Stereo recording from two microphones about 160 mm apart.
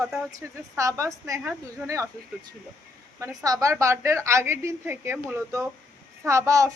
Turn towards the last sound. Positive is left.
turn(degrees=-20)  # may be behind; listen again after turning